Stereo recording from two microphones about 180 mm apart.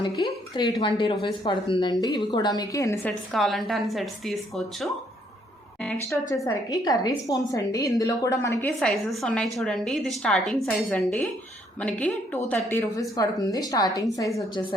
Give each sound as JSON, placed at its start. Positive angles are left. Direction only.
{"t": 0.2, "sound": "a woman's voice", "side_deg": 25}
{"t": 3.1, "sound": "a woman's voice", "side_deg": 0}
{"t": 6.3, "sound": "a woman's voice", "side_deg": 20}
{"t": 8.8, "sound": "a woman's voice", "side_deg": 0}